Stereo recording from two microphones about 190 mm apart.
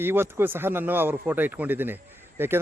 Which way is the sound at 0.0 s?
10° right (ahead or behind).